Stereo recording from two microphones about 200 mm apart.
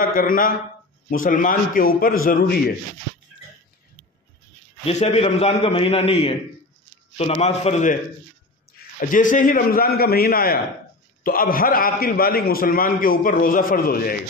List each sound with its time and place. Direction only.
0.0 s a man's voice: 45° left (ahead or behind)
4.8 s a man's voice: 30° left (ahead or behind); by 14.1 s 45° left (ahead or behind)